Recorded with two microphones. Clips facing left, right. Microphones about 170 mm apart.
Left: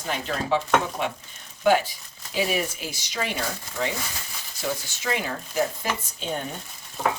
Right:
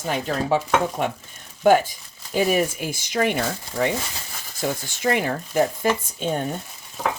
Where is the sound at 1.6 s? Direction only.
50° right (ahead or behind).